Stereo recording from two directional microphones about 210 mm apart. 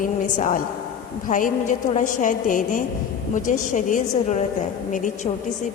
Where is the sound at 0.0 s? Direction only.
40° left (ahead or behind).